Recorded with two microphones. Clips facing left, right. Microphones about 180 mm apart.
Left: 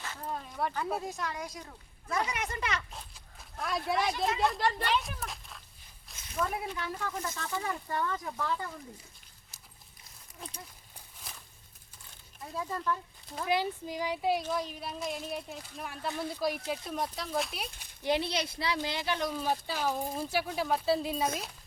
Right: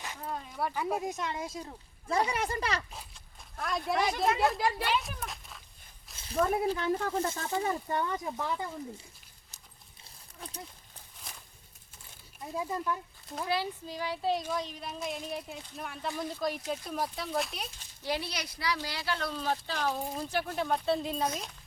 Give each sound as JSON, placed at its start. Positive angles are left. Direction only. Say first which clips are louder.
{"t": 0.2, "sound": "speech", "louder": "even", "side_deg": -5}
{"t": 2.9, "sound": "speech", "louder": "even", "side_deg": 0}
{"t": 6.1, "sound": "speech", "louder": "right 5 dB", "side_deg": -30}
{"t": 12.4, "sound": "speech", "louder": "right 2 dB", "side_deg": -15}
{"t": 13.5, "sound": "speech", "louder": "left 3 dB", "side_deg": 15}
{"t": 18.0, "sound": "speech", "louder": "left 5 dB", "side_deg": 20}